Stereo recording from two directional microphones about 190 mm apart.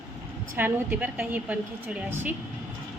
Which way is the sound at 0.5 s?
10° right (ahead or behind).